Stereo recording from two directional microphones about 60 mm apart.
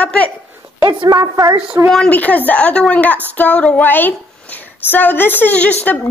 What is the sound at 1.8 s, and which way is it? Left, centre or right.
Speech, right.